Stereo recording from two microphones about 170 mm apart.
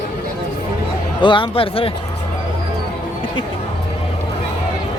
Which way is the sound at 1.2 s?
30° left (ahead or behind).